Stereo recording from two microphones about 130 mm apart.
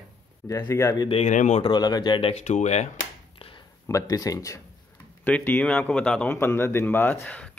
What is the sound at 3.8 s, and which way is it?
Speech, 25° left (ahead or behind).